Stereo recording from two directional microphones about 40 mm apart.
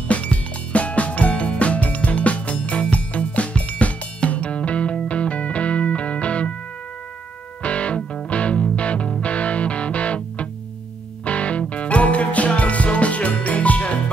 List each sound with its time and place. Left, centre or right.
0.1 s music: left
7.6 s music: left